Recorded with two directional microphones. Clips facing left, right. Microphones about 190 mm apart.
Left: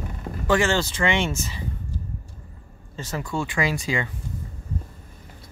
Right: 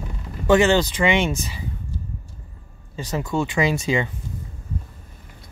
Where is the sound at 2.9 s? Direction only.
15° right (ahead or behind).